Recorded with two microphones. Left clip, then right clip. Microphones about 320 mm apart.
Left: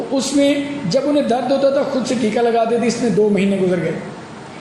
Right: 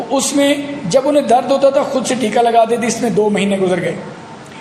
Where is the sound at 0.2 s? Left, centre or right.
Right.